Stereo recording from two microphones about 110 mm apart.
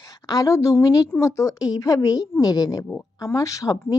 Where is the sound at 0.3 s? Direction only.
30° left (ahead or behind).